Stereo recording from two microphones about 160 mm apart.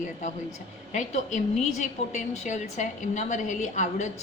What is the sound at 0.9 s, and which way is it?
A woman's voice, 50° left (ahead or behind).